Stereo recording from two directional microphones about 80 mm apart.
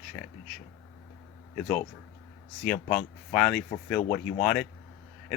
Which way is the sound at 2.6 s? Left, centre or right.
Centre.